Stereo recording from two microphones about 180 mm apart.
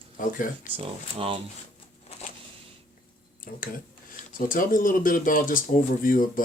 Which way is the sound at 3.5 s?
50° left (ahead or behind).